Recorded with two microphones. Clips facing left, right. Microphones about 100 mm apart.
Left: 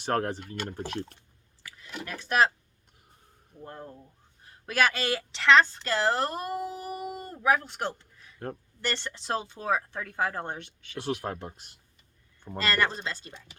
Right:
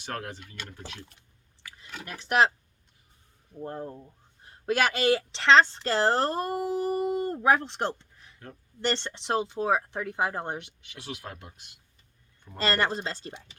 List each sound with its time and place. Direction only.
0.0 s speech: 40° left (ahead or behind)
1.8 s speech: 20° right (ahead or behind)
3.6 s speech: 30° right (ahead or behind)
8.4 s speech: 50° left (ahead or behind)
8.8 s speech: 30° right (ahead or behind)
11.0 s speech: 45° left (ahead or behind)
12.5 s speech: 30° right (ahead or behind)